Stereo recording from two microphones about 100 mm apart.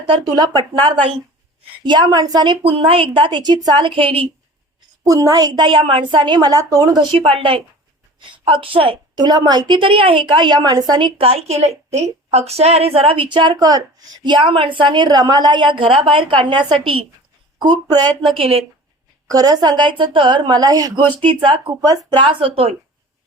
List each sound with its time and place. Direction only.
0.3 s a woman's voice: 45° right (ahead or behind); by 4.3 s 65° right (ahead or behind)
5.0 s a woman's voice: 35° right (ahead or behind)
5.6 s a woman's voice: 55° right (ahead or behind)
9.1 s a woman's voice: 40° right (ahead or behind)
11.2 s a woman's voice: 85° right; by 17.1 s 60° right (ahead or behind)
17.6 s a woman's voice: 45° right (ahead or behind)
18.3 s speech: 70° right (ahead or behind)
19.3 s a woman's voice: 40° right (ahead or behind)
21.1 s a woman's voice: 55° right (ahead or behind)
21.8 s a woman's voice: 35° right (ahead or behind)
22.2 s a woman's voice: 60° right (ahead or behind)